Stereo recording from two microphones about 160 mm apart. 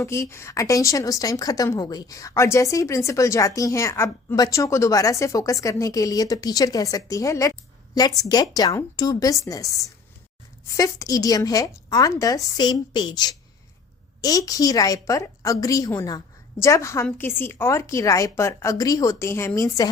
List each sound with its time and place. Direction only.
0.0 s a woman's voice: 20° left (ahead or behind)
10.8 s a woman's voice: 20° left (ahead or behind)